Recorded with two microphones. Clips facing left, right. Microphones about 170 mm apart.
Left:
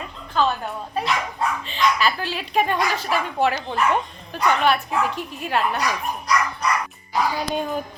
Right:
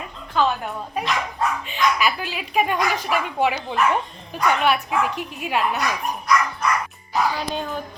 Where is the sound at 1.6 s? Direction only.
10° right (ahead or behind).